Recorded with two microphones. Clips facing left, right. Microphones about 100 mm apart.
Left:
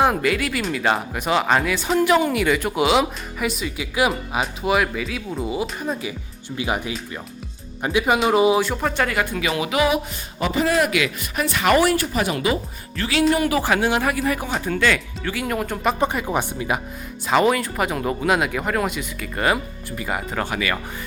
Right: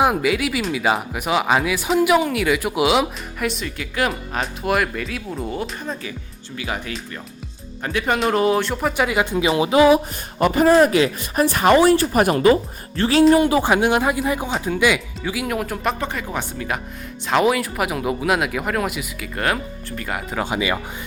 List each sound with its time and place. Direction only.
0.0 s speech: 5° right (ahead or behind)
8.9 s speech: 15° right (ahead or behind); by 10.0 s 30° right (ahead or behind)
10.4 s speech: 45° right (ahead or behind); by 12.0 s 25° right (ahead or behind)
12.1 s speech: 45° right (ahead or behind)
13.3 s speech: 25° right (ahead or behind); by 16.0 s centre (ahead or behind)
16.0 s speech: 15° left (ahead or behind)
17.2 s speech: centre (ahead or behind)
20.4 s speech: 20° right (ahead or behind)